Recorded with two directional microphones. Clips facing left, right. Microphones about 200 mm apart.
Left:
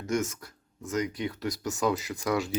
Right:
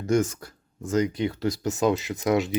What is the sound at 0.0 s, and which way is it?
Speech, 30° right (ahead or behind).